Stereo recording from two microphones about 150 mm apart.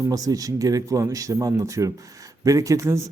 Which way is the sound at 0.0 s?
25° right (ahead or behind).